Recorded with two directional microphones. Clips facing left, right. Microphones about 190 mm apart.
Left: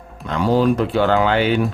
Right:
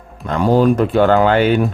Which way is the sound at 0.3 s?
50° right (ahead or behind).